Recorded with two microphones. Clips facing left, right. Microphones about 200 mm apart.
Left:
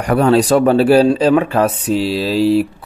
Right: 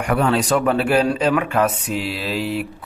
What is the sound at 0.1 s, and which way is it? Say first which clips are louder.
Speech: left 7 dB; 35° left (ahead or behind).